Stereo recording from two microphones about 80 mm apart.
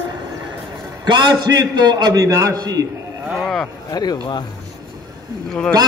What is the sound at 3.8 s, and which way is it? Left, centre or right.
Speech, left.